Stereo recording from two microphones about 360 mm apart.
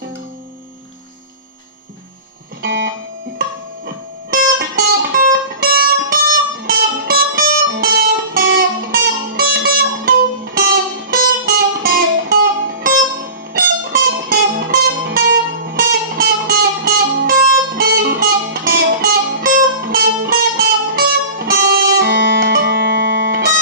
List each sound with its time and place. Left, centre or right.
3.3 s music: right